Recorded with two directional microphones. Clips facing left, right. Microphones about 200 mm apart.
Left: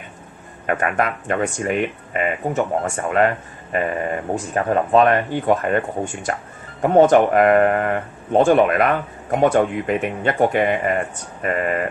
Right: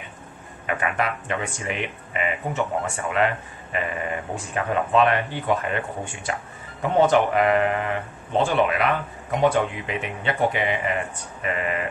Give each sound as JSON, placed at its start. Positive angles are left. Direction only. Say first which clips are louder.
{"t": 0.7, "sound": "speech", "louder": "left 5 dB", "side_deg": 50}